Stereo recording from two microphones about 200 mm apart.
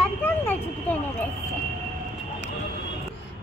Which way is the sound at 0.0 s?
10° left (ahead or behind).